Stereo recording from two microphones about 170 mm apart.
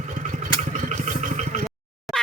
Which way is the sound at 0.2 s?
50° right (ahead or behind).